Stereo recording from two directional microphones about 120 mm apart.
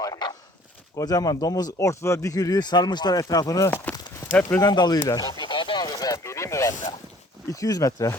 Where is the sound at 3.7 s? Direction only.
20° left (ahead or behind).